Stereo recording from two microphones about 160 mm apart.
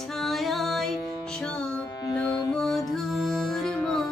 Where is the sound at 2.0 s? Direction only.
25° left (ahead or behind).